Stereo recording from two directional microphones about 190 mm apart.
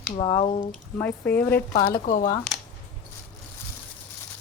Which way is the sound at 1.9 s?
40° left (ahead or behind).